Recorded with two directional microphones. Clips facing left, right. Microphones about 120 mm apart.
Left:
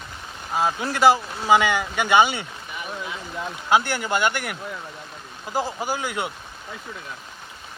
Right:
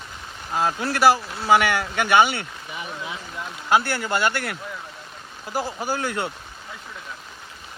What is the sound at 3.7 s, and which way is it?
Speech, 20° left (ahead or behind).